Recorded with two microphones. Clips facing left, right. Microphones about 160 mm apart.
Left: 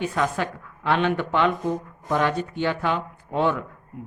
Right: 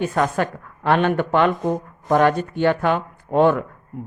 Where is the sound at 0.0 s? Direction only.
50° right (ahead or behind).